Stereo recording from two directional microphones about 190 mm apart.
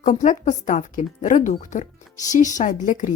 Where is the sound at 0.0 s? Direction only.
40° left (ahead or behind).